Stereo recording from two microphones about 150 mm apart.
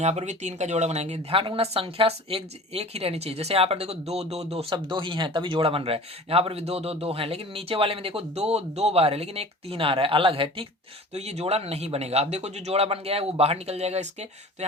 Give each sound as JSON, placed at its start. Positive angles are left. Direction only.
{"t": 0.0, "sound": "speech", "side_deg": -50}